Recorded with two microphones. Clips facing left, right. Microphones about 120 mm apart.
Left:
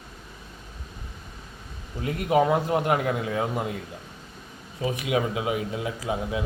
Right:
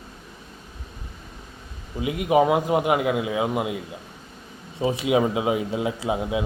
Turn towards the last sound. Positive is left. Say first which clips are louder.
# right 4 dB
turn(degrees=-20)  # may be behind; listen again after turning